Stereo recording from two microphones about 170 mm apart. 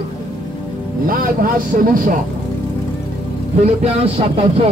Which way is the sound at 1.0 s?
55° right (ahead or behind).